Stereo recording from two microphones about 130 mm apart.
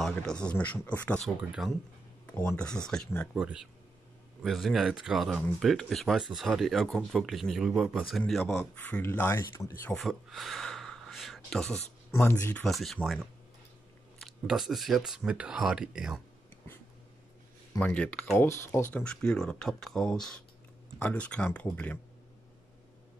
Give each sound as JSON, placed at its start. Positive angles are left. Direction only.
{"t": 0.0, "sound": "speech", "side_deg": 5}
{"t": 3.3, "sound": "speech", "side_deg": -5}
{"t": 9.9, "sound": "gasp", "side_deg": 0}
{"t": 12.1, "sound": "speech", "side_deg": 20}
{"t": 12.6, "sound": "speech", "side_deg": 0}
{"t": 17.7, "sound": "speech", "side_deg": 10}